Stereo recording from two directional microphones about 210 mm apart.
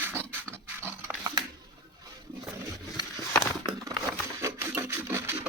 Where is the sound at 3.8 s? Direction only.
15° right (ahead or behind).